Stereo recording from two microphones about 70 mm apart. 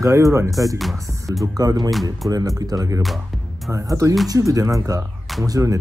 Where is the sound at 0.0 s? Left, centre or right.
Right.